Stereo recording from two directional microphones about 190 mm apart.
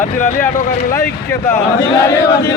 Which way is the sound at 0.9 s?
15° left (ahead or behind).